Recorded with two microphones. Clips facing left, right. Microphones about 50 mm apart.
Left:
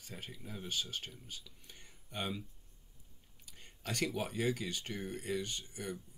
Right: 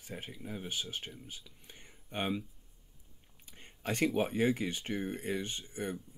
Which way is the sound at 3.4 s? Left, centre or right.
Right.